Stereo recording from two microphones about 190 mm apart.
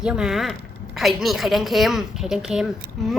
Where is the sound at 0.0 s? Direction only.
5° right (ahead or behind).